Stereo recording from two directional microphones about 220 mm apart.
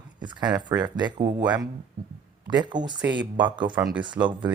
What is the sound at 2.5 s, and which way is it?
Speech, 20° right (ahead or behind).